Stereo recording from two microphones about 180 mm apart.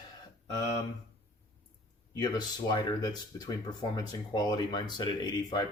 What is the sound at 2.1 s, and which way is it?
Speech, 20° left (ahead or behind).